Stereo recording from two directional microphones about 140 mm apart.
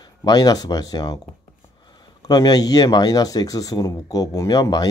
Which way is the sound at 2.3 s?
30° left (ahead or behind).